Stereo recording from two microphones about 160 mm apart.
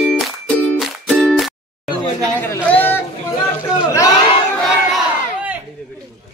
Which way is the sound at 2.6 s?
10° left (ahead or behind).